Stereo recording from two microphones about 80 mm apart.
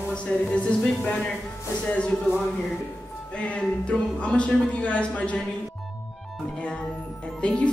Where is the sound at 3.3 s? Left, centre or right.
Centre.